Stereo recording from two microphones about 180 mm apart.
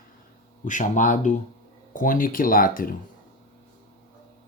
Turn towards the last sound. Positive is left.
turn(degrees=50)  # may be behind; listen again after turning